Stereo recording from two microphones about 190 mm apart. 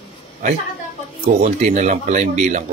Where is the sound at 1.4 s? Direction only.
40° right (ahead or behind).